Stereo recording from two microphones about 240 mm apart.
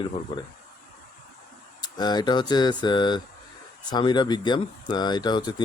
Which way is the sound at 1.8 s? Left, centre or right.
Centre.